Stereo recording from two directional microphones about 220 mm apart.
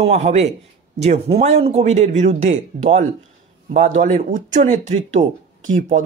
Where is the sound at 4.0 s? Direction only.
35° right (ahead or behind).